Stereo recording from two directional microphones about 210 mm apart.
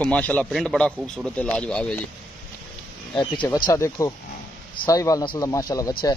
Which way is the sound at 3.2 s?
25° left (ahead or behind).